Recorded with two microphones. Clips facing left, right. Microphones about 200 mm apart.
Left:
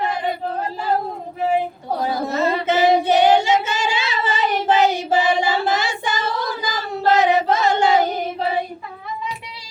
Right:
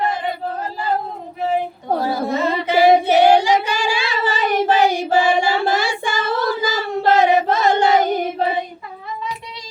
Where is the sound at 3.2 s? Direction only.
20° left (ahead or behind).